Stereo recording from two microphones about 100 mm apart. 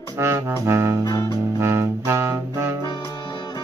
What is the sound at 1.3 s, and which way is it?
Music, 25° right (ahead or behind).